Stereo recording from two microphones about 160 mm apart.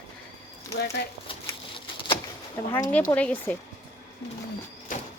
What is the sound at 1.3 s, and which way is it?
Patter, 30° left (ahead or behind).